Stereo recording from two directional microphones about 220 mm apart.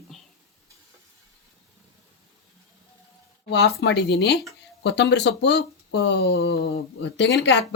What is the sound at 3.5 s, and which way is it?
Speech, 50° left (ahead or behind).